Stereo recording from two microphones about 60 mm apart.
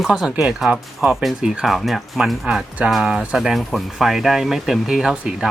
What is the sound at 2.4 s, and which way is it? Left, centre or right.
Speech, centre.